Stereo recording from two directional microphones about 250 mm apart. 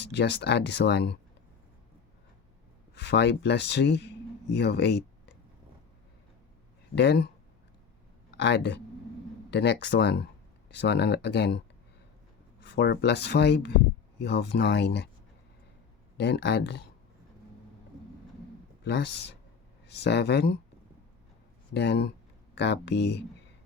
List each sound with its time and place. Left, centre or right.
0.0 s speech: left
2.9 s speech: left
6.9 s speech: left
8.4 s speech: left
16.1 s speech: left
18.9 s speech: left
21.7 s speech: left